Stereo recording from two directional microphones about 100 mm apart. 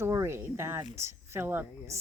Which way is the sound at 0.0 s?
25° right (ahead or behind).